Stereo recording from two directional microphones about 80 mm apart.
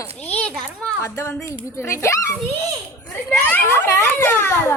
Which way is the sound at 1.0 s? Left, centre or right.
Left.